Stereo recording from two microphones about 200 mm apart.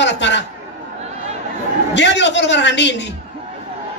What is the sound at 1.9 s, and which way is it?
Speech, 60° left (ahead or behind).